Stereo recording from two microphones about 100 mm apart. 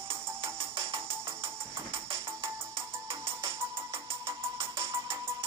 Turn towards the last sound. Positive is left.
turn(degrees=-30)  # may be behind; listen again after turning